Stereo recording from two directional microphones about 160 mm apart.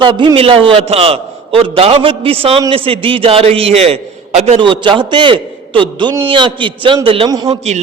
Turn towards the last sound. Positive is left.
turn(degrees=-45)  # may be behind; listen again after turning